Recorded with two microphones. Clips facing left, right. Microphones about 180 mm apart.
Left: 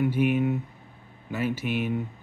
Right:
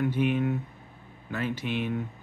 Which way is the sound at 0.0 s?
10° left (ahead or behind).